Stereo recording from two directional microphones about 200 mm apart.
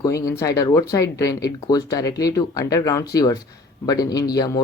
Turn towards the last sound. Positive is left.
turn(degrees=20)  # may be behind; listen again after turning